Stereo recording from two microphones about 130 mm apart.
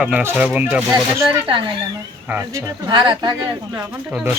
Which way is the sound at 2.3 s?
20° right (ahead or behind).